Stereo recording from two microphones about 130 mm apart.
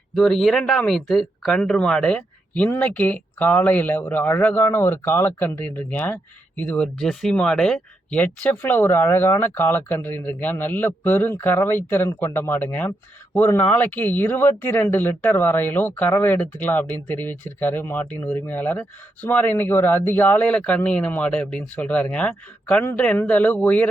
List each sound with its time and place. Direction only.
0.1 s speech: 5° left (ahead or behind)